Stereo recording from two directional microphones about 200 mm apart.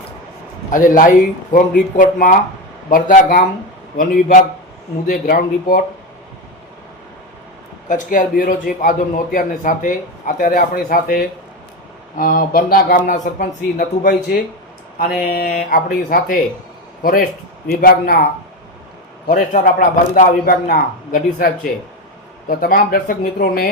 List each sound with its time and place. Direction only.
0.7 s a man's voice: 45° left (ahead or behind)
5.0 s a man's voice: 45° left (ahead or behind)
7.9 s a man's voice: 40° left (ahead or behind)
19.3 s a man's voice: 40° left (ahead or behind)